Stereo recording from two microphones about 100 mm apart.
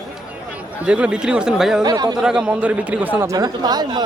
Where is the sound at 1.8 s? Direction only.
40° right (ahead or behind).